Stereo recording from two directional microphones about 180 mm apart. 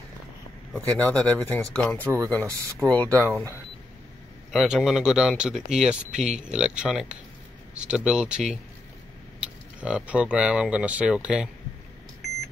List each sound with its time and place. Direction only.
0.9 s speech: 10° left (ahead or behind)
3.1 s speech: 15° right (ahead or behind)
4.5 s speech: centre (ahead or behind)